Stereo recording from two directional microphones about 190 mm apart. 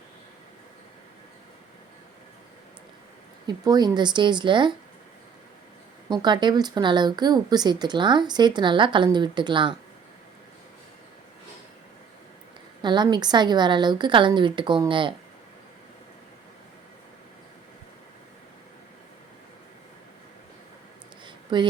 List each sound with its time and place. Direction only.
3.4 s speech: 20° right (ahead or behind)
6.1 s speech: 25° right (ahead or behind)
12.8 s speech: 25° right (ahead or behind)
21.2 s a sound: 25° right (ahead or behind)